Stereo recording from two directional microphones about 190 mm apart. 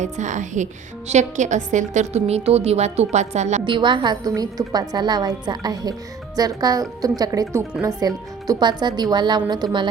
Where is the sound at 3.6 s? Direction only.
25° right (ahead or behind).